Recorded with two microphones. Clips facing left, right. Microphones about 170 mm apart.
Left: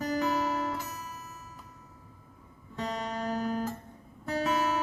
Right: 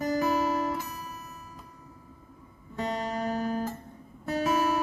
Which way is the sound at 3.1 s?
5° right (ahead or behind).